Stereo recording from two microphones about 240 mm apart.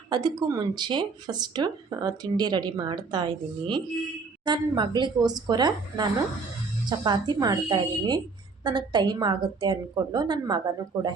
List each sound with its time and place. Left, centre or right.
0.1 s speech: centre